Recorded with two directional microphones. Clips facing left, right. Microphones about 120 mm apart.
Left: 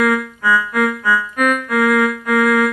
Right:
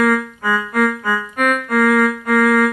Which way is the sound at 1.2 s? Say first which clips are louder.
Left 1 dB; 40° right (ahead or behind).